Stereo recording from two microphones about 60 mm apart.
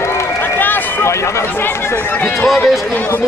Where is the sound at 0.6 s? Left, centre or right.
Left.